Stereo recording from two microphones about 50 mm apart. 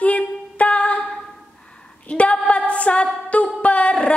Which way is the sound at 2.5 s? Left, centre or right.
Left.